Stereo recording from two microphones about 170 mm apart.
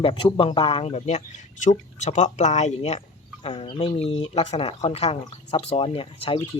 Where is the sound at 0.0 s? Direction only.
30° left (ahead or behind).